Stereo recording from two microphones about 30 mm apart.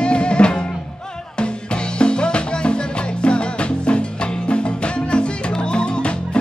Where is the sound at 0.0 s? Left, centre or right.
Left.